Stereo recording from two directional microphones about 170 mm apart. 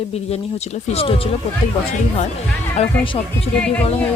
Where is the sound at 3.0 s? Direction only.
30° left (ahead or behind).